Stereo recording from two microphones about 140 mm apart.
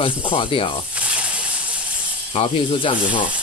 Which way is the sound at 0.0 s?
40° left (ahead or behind).